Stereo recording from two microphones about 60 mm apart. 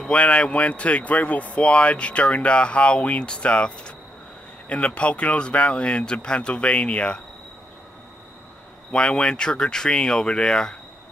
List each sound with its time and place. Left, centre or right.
0.0 s speech: centre
8.9 s speech: centre